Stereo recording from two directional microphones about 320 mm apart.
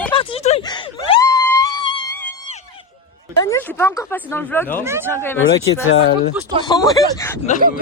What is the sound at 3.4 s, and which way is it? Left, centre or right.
Speech, centre.